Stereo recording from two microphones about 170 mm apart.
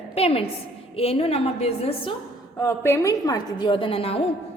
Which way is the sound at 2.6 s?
15° left (ahead or behind).